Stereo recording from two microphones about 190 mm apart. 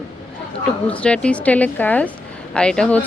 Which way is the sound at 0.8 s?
5° left (ahead or behind).